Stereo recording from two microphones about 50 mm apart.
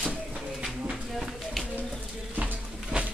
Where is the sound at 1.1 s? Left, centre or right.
Centre.